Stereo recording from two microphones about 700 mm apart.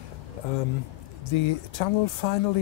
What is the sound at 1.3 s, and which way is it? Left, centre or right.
Speech, left.